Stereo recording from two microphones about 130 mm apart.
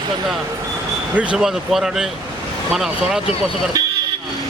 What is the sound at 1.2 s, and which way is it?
Speech, 5° right (ahead or behind).